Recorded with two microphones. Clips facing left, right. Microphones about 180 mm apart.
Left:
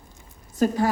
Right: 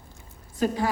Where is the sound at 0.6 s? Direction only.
45° left (ahead or behind).